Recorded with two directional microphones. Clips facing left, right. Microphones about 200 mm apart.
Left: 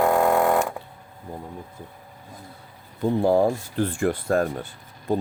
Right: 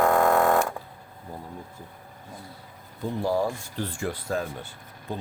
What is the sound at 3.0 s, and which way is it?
Speech, 55° left (ahead or behind).